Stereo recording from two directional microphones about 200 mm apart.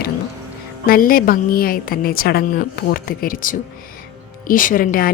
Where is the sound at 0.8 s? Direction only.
45° left (ahead or behind).